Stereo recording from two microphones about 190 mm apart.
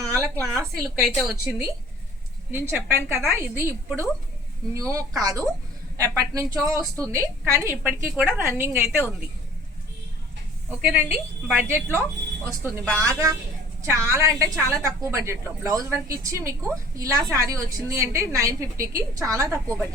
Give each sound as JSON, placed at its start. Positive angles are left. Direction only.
{"t": 0.2, "sound": "a woman's voice", "side_deg": -15}
{"t": 0.8, "sound": "a woman's voice", "side_deg": 0}
{"t": 10.7, "sound": "a woman's voice", "side_deg": -10}
{"t": 12.8, "sound": "a woman's voice", "side_deg": 5}
{"t": 13.1, "sound": "a woman's voice", "side_deg": -15}